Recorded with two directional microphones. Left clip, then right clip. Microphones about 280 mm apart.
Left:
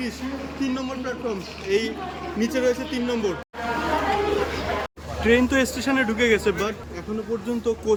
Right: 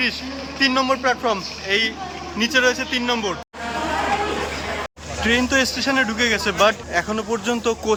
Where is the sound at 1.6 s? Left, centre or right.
Centre.